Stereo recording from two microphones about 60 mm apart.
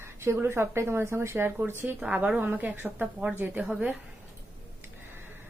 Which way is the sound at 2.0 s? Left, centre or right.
Centre.